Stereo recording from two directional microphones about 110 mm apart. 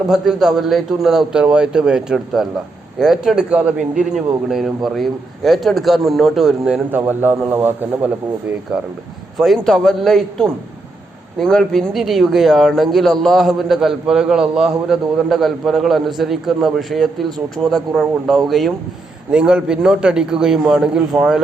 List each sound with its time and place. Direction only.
0.1 s a man's voice: 5° right (ahead or behind)
6.9 s a man's voice: 20° right (ahead or behind)
9.4 s a man's voice: centre (ahead or behind)